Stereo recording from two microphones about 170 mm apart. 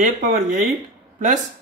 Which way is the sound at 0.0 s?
50° right (ahead or behind).